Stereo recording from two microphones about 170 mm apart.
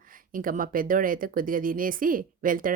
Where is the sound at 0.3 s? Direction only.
55° right (ahead or behind).